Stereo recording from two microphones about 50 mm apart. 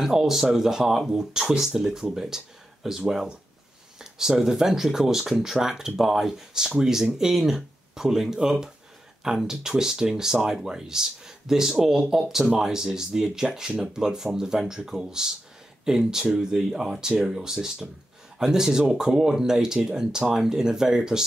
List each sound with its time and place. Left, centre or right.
0.0 s speech: centre